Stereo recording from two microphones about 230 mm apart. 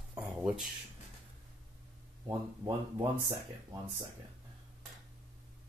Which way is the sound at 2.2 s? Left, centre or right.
Centre.